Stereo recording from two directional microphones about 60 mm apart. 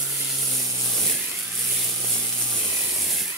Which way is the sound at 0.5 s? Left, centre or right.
Centre.